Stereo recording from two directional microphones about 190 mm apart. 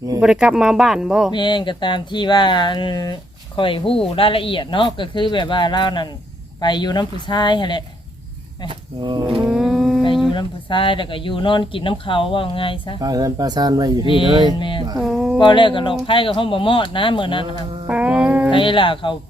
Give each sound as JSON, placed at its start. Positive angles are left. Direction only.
{"t": 0.2, "sound": "speech", "side_deg": -5}
{"t": 1.3, "sound": "speech", "side_deg": 25}
{"t": 8.6, "sound": "speech", "side_deg": -25}
{"t": 9.5, "sound": "a sound", "side_deg": 0}
{"t": 10.3, "sound": "speech", "side_deg": 25}
{"t": 13.0, "sound": "speech", "side_deg": -20}
{"t": 14.0, "sound": "speech", "side_deg": 25}
{"t": 14.9, "sound": "a sound", "side_deg": 0}
{"t": 15.4, "sound": "speech", "side_deg": 25}
{"t": 17.8, "sound": "a sound", "side_deg": -5}
{"t": 18.5, "sound": "speech", "side_deg": 25}